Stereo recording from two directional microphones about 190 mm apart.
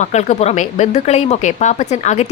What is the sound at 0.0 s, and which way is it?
A woman's voice, 35° left (ahead or behind).